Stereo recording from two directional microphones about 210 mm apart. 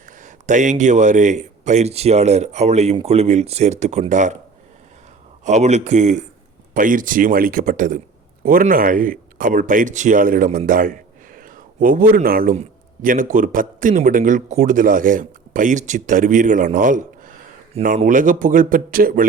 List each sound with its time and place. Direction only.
0.0 s speech: 35° right (ahead or behind)
5.5 s speech: 35° right (ahead or behind)